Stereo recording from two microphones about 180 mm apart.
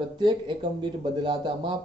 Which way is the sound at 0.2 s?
25° right (ahead or behind).